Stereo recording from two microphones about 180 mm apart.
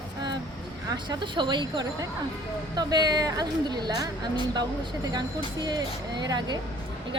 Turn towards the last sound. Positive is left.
turn(degrees=-25)  # may be behind; listen again after turning